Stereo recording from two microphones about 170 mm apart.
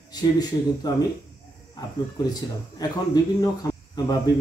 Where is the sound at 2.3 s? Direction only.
25° left (ahead or behind).